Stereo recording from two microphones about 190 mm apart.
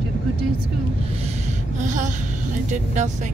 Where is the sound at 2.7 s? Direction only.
40° right (ahead or behind).